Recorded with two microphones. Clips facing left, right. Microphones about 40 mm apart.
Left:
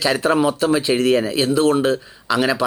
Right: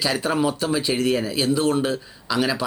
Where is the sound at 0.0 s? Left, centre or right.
Centre.